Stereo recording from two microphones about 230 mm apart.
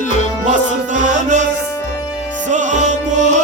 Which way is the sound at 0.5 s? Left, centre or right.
Right.